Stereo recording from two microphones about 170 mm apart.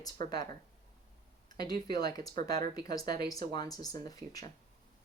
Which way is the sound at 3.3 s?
20° left (ahead or behind).